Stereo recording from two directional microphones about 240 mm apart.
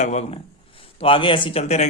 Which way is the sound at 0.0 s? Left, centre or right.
Left.